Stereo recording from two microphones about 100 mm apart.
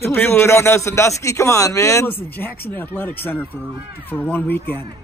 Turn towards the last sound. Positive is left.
turn(degrees=20)  # may be behind; listen again after turning